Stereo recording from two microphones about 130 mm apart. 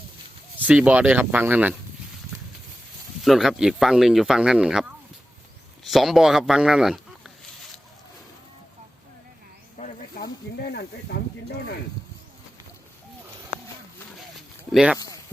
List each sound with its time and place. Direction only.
0.6 s speech: 10° right (ahead or behind)
3.2 s speech: 5° right (ahead or behind)
14.7 s speech: 5° right (ahead or behind)
14.9 s a sound: 25° left (ahead or behind)